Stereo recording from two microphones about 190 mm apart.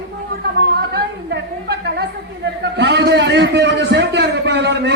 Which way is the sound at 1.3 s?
60° right (ahead or behind).